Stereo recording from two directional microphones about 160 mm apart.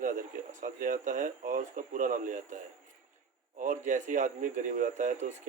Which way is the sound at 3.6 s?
50° right (ahead or behind).